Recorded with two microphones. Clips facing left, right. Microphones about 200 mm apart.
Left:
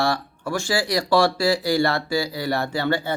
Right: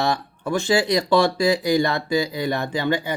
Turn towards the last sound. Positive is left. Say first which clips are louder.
# even
turn(degrees=-15)  # may be behind; listen again after turning